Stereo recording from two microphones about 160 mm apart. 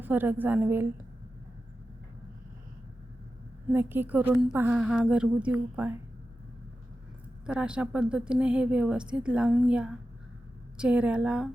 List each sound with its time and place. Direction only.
0.0 s a woman's voice: 10° right (ahead or behind)
3.7 s a woman's voice: 10° right (ahead or behind)
4.3 s a woman's voice: centre (ahead or behind)
7.4 s a woman's voice: 5° right (ahead or behind)